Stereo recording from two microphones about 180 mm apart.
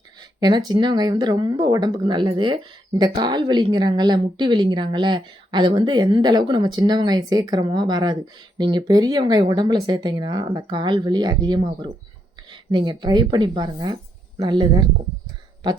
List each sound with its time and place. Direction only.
0.3 s speech: 20° right (ahead or behind)